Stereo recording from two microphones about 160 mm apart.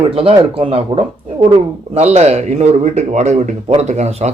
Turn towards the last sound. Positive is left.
turn(degrees=-45)  # may be behind; listen again after turning